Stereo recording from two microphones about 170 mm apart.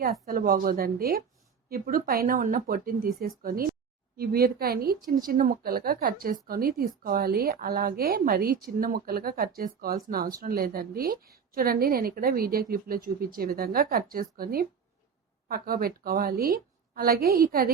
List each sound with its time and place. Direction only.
0.0 s a woman's voice: 60° right (ahead or behind)